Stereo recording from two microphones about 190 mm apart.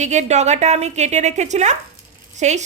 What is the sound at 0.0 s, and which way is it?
A woman's voice, 35° right (ahead or behind).